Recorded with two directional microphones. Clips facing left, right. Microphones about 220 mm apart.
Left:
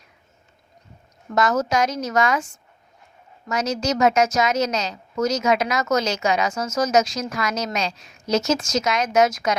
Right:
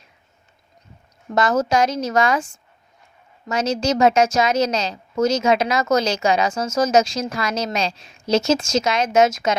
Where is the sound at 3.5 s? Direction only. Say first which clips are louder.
Right 3 dB; 30° right (ahead or behind).